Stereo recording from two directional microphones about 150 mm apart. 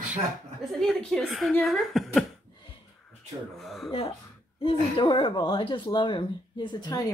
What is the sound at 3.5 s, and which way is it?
Speech, centre (ahead or behind).